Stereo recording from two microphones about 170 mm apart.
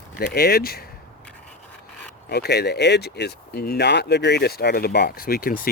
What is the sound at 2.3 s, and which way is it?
Speech, 70° left (ahead or behind).